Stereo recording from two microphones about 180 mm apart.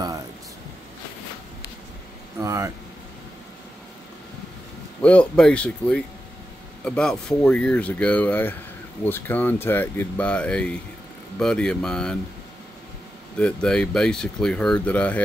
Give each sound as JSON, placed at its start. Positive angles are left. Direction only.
{"t": 2.4, "sound": "speech", "side_deg": -15}
{"t": 5.0, "sound": "speech", "side_deg": 5}
{"t": 13.4, "sound": "speech", "side_deg": 5}